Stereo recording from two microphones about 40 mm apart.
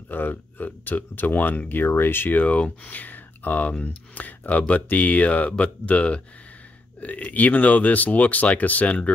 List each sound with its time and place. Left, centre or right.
0.1 s speech: left
2.3 s speech: left